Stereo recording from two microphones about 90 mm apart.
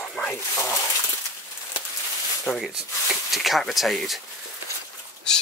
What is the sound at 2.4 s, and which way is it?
Speech, centre (ahead or behind).